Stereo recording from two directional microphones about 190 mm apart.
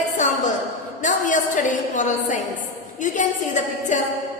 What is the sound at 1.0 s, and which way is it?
A woman's voice, 40° left (ahead or behind).